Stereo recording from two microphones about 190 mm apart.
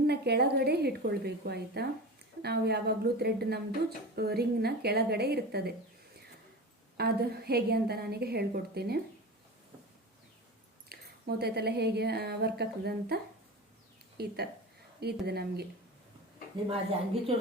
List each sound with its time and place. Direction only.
0.1 s speech: 60° right (ahead or behind)
6.9 s speech: 55° right (ahead or behind)
10.8 s speech: 55° right (ahead or behind)
14.2 s speech: 55° right (ahead or behind)